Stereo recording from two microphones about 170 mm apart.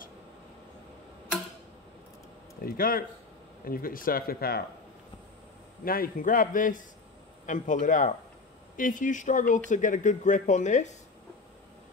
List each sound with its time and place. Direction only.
2.6 s speech: 60° left (ahead or behind)
5.9 s speech: 60° left (ahead or behind)